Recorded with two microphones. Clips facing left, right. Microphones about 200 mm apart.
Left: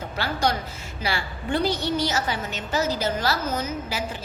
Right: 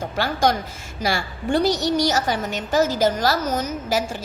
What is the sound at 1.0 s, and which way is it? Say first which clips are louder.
A woman's voice: right 5 dB; 45° right (ahead or behind).